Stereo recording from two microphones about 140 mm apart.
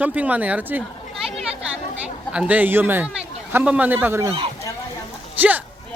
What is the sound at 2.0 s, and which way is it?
Speech, 10° right (ahead or behind).